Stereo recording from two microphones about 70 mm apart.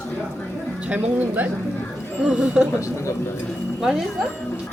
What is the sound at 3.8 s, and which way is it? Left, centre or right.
Speech, centre.